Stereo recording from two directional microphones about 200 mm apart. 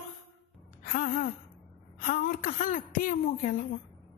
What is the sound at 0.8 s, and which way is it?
Speech, 45° left (ahead or behind).